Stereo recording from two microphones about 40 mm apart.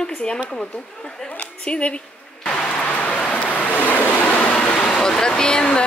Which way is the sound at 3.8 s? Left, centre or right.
Left.